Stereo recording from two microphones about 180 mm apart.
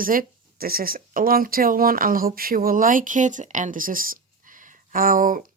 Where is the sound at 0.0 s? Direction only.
50° right (ahead or behind).